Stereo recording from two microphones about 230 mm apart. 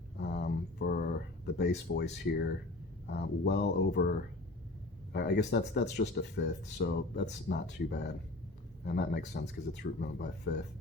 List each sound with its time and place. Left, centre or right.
0.2 s a sound: left
1.5 s speech: left
5.1 s speech: left